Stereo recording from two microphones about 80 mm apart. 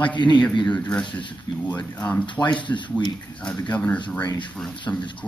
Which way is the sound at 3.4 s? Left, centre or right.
Centre.